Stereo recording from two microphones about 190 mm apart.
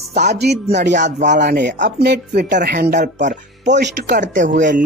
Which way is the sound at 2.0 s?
60° right (ahead or behind).